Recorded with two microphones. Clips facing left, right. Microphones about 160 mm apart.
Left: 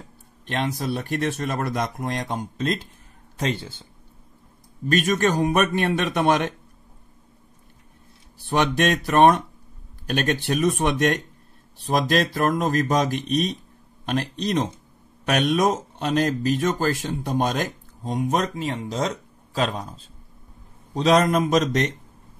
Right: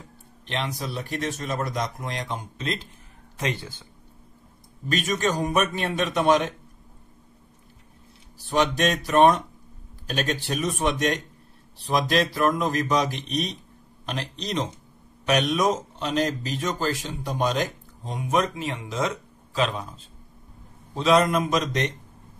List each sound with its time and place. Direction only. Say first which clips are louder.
0.5 s speech: left 5 dB; 50° left (ahead or behind)
4.8 s a man's voice: left 4 dB; 50° left (ahead or behind)
8.5 s a man's voice: left 2 dB; 60° left (ahead or behind); by 19.9 s 40° left (ahead or behind)
20.9 s a man's voice: left 2 dB; 40° left (ahead or behind)